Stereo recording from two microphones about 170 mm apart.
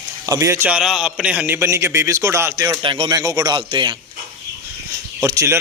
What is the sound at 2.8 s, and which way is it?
Speech, 30° right (ahead or behind).